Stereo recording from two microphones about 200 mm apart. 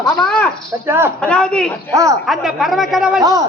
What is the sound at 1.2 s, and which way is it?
A man's voice, 5° left (ahead or behind).